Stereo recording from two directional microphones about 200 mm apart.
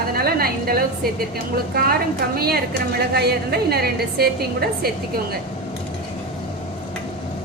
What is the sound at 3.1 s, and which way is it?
A woman's voice, 55° right (ahead or behind).